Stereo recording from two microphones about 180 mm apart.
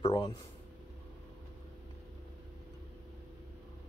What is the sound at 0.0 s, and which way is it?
Speech, 30° left (ahead or behind).